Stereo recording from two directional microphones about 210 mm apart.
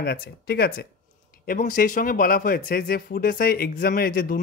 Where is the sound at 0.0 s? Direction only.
50° left (ahead or behind).